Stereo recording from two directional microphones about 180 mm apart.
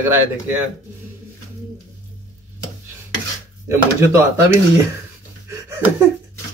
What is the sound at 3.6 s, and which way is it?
Speech, 15° right (ahead or behind).